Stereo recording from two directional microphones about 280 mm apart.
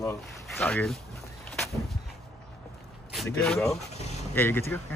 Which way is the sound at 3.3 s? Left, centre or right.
Centre.